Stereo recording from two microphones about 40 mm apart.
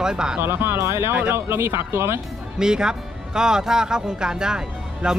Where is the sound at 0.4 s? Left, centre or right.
Right.